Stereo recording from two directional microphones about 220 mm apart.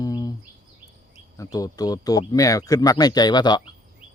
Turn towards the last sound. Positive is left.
turn(degrees=20)  # may be behind; listen again after turning